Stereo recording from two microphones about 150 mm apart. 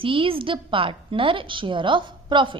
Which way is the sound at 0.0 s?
35° right (ahead or behind).